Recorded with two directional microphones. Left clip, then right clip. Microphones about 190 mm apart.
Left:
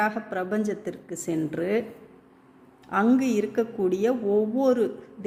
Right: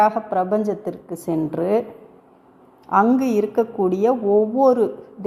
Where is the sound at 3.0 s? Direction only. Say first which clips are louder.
Right 1 dB; 5° right (ahead or behind).